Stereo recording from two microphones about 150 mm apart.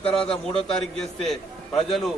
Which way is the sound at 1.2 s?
Centre (ahead or behind).